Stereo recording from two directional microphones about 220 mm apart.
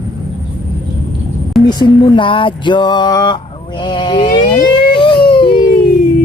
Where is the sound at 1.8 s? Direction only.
20° left (ahead or behind).